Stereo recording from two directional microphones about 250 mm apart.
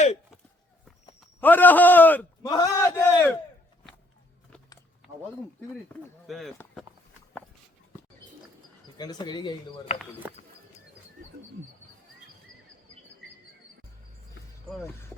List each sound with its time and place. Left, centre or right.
1.4 s a man's voice: centre
6.2 s speech: centre
9.0 s a man's voice: centre
10.2 s speech: centre